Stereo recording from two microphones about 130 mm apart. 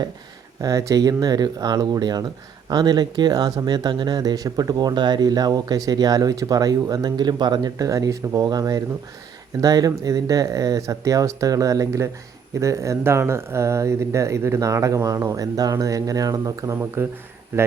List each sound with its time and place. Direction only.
0.6 s speech: 25° right (ahead or behind)